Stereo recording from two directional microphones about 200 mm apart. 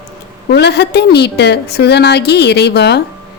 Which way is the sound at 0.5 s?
55° left (ahead or behind).